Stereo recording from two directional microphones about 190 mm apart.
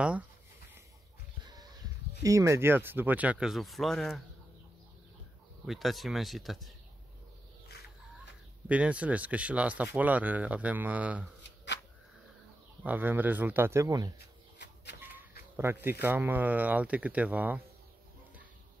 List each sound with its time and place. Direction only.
1.4 s a sound: 20° right (ahead or behind)
2.2 s speech: 15° right (ahead or behind); by 4.2 s centre (ahead or behind)
5.7 s speech: centre (ahead or behind)
8.6 s speech: 5° right (ahead or behind)
12.8 s speech: 10° right (ahead or behind)
14.1 s bird: 60° left (ahead or behind)
15.5 s speech: 10° right (ahead or behind)